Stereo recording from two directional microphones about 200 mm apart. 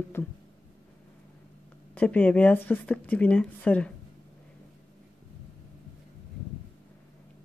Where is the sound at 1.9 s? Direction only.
5° left (ahead or behind).